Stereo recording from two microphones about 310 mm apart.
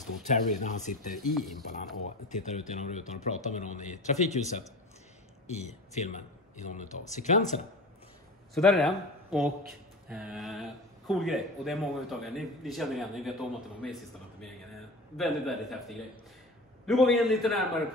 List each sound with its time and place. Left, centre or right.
0.0 s a man's voice: left
1.1 s speech: centre
2.2 s a man's voice: left
8.5 s speech: centre
15.1 s speech: centre